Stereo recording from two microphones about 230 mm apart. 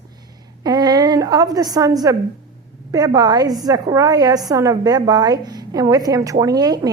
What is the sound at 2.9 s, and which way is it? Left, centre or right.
A woman's voice, centre.